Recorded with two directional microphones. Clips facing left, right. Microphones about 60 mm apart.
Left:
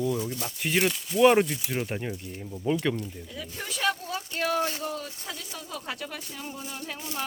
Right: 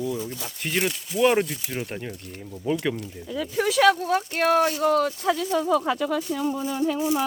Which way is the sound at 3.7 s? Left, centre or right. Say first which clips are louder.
Right 9 dB; right.